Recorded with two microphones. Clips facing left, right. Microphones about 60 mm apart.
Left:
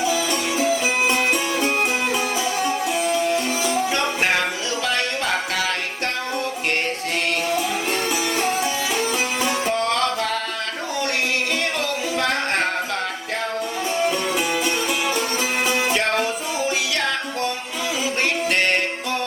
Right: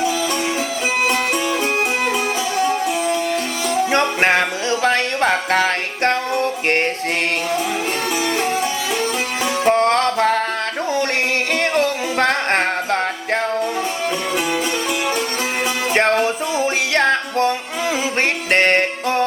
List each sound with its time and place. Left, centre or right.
3.7 s music: right
9.6 s music: right
11.6 s music: right
15.9 s music: right
18.5 s music: right